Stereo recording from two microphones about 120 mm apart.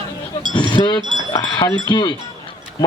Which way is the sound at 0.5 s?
40° left (ahead or behind).